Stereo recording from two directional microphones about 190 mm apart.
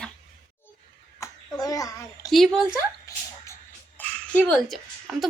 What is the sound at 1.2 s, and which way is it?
A child's voice, 20° left (ahead or behind).